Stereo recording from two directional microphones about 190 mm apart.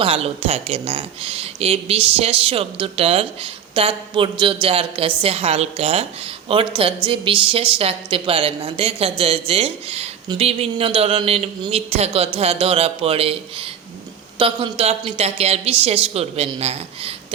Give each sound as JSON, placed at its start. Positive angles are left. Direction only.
{"t": 0.0, "sound": "a woman's voice", "side_deg": -30}